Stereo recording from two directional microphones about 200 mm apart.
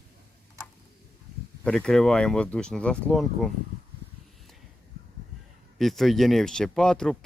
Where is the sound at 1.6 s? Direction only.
5° left (ahead or behind).